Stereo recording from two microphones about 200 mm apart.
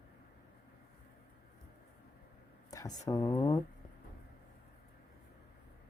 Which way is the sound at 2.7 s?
20° left (ahead or behind).